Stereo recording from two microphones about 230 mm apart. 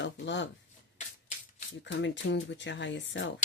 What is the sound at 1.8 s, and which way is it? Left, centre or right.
Speech, left.